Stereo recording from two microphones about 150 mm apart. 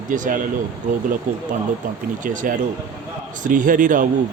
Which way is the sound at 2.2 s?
60° right (ahead or behind).